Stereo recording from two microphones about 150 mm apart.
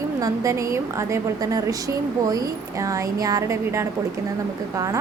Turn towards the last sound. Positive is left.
turn(degrees=-20)  # may be behind; listen again after turning